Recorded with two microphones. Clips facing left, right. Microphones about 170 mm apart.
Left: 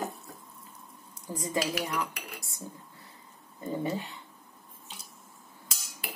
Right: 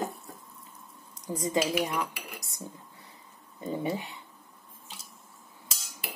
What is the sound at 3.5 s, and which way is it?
Speech, 15° right (ahead or behind).